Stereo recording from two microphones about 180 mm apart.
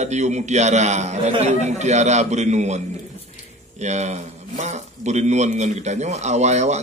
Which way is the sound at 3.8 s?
40° right (ahead or behind).